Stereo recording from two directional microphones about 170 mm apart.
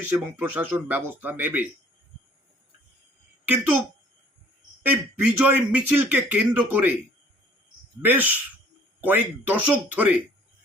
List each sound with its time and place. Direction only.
0.0 s a man's voice: 10° right (ahead or behind)
3.4 s a woman's voice: 10° right (ahead or behind)
4.9 s a man's voice: 10° right (ahead or behind)
8.0 s a man's voice: 10° right (ahead or behind)